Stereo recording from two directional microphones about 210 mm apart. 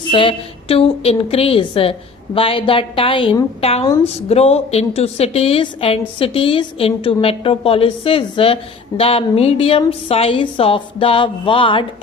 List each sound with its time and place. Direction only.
0.1 s a woman's voice: 25° left (ahead or behind)